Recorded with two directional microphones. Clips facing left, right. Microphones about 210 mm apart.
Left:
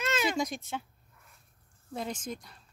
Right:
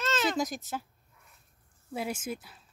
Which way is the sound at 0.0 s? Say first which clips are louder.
Even; 10° left (ahead or behind).